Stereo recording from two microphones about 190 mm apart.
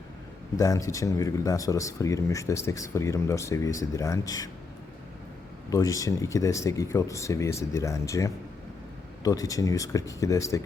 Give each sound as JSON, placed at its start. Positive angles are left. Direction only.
{"t": 0.5, "sound": "speech", "side_deg": 15}
{"t": 5.7, "sound": "speech", "side_deg": 15}